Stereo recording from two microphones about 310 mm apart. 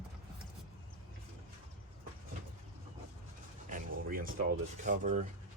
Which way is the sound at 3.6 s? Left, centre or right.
Right.